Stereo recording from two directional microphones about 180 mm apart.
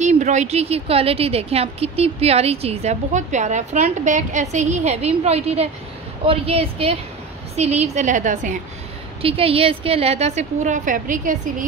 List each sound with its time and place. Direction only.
0.0 s a woman's voice: 40° right (ahead or behind)
9.2 s a woman's voice: 30° right (ahead or behind); by 11.3 s 45° right (ahead or behind)